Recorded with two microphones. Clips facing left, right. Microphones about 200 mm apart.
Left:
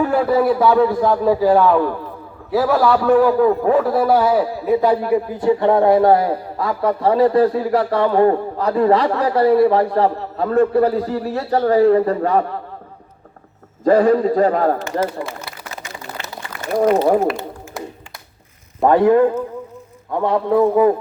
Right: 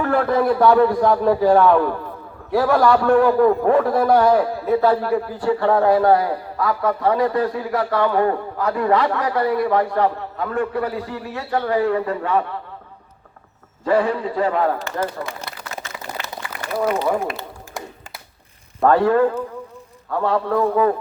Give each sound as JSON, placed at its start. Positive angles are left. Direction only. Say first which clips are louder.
{"t": 0.0, "sound": "a man's voice", "louder": "left 2 dB", "side_deg": 10}
{"t": 13.8, "sound": "a man's voice", "louder": "left 6 dB", "side_deg": 40}
{"t": 15.0, "sound": "a man's voice", "louder": "left 3 dB", "side_deg": 0}
{"t": 15.4, "sound": "a sound", "louder": "even", "side_deg": 10}
{"t": 16.7, "sound": "speech", "louder": "left 6 dB", "side_deg": 45}
{"t": 17.7, "sound": "a sound", "louder": "left 3 dB", "side_deg": 0}
{"t": 18.8, "sound": "a man's voice", "louder": "left 3 dB", "side_deg": 15}